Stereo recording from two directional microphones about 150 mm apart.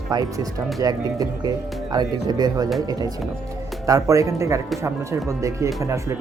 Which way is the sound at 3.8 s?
20° right (ahead or behind).